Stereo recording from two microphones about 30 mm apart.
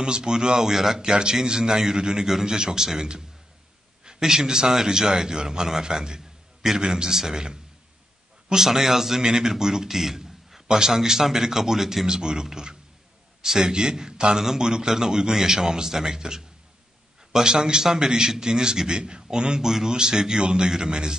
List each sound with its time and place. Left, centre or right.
0.0 s a man's voice: right
1.1 s a man's voice: right
8.5 s a man's voice: centre
12.1 s a man's voice: right